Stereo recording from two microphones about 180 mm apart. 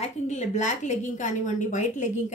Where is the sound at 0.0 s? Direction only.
40° left (ahead or behind).